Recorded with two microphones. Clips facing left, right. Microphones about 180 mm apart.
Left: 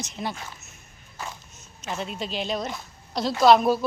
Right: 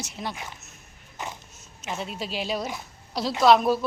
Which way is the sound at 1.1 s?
20° right (ahead or behind).